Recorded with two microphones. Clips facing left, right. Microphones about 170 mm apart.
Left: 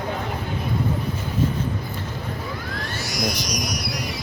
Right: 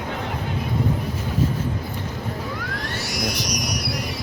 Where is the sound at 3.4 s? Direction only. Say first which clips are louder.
Right 1 dB; 65° right (ahead or behind).